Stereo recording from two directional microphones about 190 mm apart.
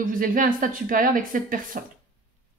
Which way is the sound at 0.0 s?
45° right (ahead or behind).